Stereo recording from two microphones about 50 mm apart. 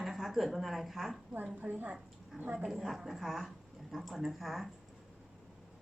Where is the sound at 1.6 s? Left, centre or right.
Right.